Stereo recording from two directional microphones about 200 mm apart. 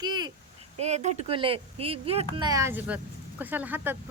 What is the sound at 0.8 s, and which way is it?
Speech, 35° right (ahead or behind).